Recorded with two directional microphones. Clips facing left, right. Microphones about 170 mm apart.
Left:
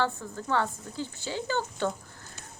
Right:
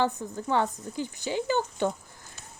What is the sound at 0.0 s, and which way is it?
Speech, 20° right (ahead or behind).